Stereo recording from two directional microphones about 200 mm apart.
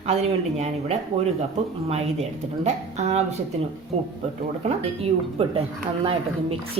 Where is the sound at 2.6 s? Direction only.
35° right (ahead or behind).